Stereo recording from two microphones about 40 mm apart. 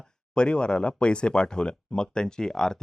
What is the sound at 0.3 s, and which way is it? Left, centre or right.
Speech, left.